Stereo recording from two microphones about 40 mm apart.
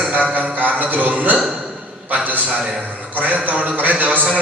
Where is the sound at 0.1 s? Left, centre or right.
Right.